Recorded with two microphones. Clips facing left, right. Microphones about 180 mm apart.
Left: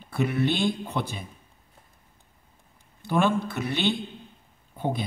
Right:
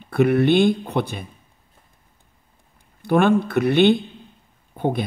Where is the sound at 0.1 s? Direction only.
60° right (ahead or behind).